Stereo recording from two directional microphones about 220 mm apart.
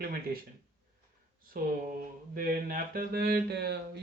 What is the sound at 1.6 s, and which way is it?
Speech, 40° right (ahead or behind).